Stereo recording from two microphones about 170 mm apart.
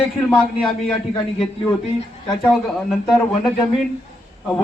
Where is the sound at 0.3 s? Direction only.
Centre (ahead or behind).